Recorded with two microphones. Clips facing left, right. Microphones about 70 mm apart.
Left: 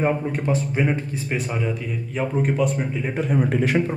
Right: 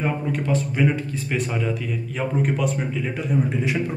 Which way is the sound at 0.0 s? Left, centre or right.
Left.